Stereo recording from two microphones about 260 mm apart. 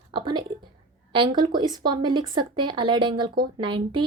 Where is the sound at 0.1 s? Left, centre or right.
Centre.